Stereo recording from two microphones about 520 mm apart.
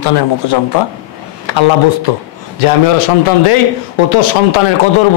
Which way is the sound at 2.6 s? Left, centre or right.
Left.